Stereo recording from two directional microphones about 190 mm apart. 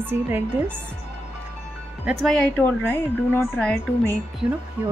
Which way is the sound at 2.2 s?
5° left (ahead or behind).